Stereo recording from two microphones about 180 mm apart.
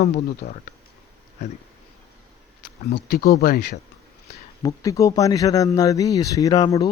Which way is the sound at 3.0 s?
60° left (ahead or behind).